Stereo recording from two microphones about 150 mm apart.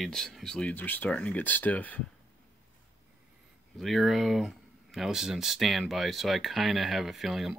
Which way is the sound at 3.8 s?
Centre (ahead or behind).